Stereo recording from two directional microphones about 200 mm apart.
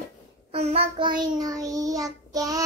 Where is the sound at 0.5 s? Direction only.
35° right (ahead or behind).